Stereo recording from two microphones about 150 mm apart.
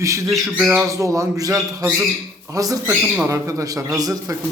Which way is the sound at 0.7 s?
20° right (ahead or behind).